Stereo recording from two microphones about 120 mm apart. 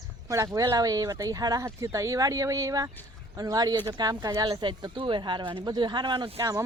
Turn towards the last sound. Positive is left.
turn(degrees=-30)  # may be behind; listen again after turning